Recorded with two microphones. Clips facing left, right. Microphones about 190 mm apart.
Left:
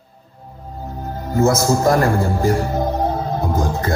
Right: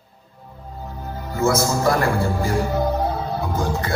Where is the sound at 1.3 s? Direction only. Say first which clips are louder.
Left 4 dB; 45° left (ahead or behind).